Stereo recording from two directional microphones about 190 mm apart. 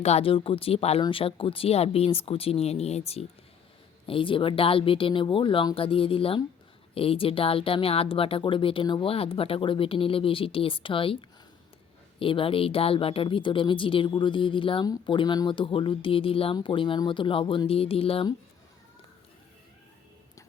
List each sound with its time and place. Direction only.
0.0 s speech: 30° left (ahead or behind)
12.2 s speech: 30° left (ahead or behind)